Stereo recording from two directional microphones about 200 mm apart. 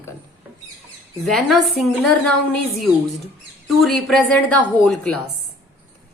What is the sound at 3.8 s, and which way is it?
Speech, 5° left (ahead or behind).